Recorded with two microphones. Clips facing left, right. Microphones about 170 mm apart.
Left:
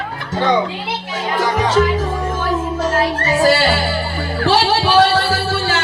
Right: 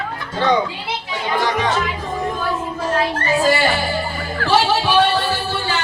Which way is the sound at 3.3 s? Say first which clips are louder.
Left 3 dB; 80° left.